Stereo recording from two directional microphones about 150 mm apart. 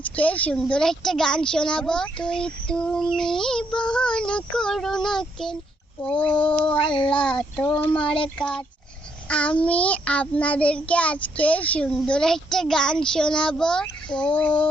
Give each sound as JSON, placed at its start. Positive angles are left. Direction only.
{"t": 0.0, "sound": "speech", "side_deg": 10}
{"t": 6.7, "sound": "speech", "side_deg": 35}
{"t": 7.1, "sound": "child singing", "side_deg": 5}
{"t": 8.4, "sound": "speech", "side_deg": 5}
{"t": 9.3, "sound": "child singing", "side_deg": 10}